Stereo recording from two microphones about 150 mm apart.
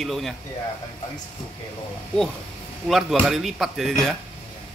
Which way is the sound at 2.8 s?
Centre (ahead or behind).